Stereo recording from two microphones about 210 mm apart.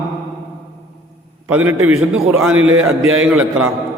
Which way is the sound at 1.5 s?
10° right (ahead or behind).